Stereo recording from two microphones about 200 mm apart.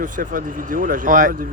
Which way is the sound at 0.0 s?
40° right (ahead or behind).